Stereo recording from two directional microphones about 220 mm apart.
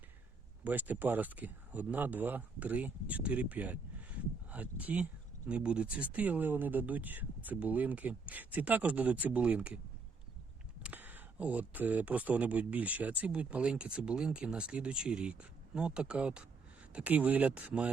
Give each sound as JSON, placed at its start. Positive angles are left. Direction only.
{"t": 0.6, "sound": "speech", "side_deg": -5}
{"t": 10.8, "sound": "speech", "side_deg": -10}